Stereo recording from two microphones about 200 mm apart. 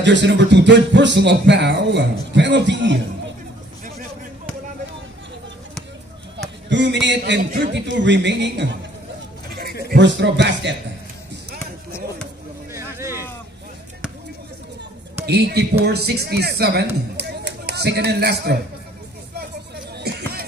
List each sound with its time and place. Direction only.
0.0 s speech: 60° right (ahead or behind)
6.7 s speech: 60° right (ahead or behind)
9.8 s speech: 60° right (ahead or behind)
12.7 s a sound: 15° right (ahead or behind)
15.2 s speech: 55° right (ahead or behind)
20.0 s a sound: 55° right (ahead or behind)